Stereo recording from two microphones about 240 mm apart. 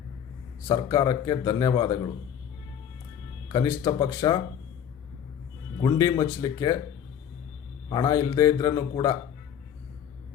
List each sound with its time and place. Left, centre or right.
0.7 s a man's voice: centre
3.5 s a man's voice: centre
5.8 s a man's voice: centre
7.9 s a man's voice: centre